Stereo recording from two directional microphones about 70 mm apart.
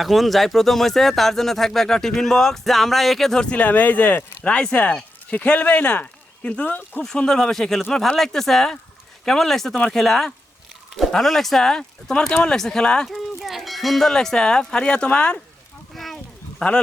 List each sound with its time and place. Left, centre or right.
0.0 s speech: centre
7.0 s speech: centre
13.1 s speech: centre
16.0 s a sound: centre